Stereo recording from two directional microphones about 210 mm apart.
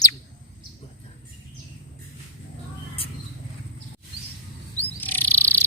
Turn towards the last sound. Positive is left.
turn(degrees=10)  # may be behind; listen again after turning